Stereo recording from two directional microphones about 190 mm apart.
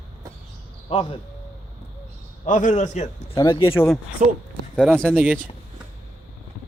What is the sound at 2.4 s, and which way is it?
Speech, 40° left (ahead or behind).